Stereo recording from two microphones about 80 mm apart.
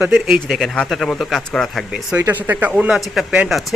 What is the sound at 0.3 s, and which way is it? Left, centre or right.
Speech, centre.